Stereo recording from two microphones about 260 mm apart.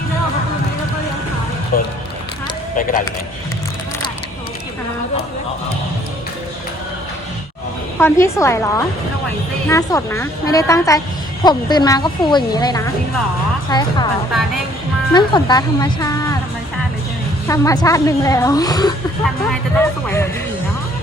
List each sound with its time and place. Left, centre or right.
1.7 s speech: left
7.9 s speech: centre
15.1 s speech: centre
17.5 s speech: centre